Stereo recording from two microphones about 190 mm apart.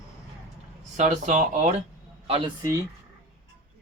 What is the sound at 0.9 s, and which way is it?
Speech, 40° right (ahead or behind).